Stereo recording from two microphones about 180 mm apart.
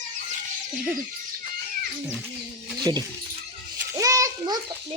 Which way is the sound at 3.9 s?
20° right (ahead or behind).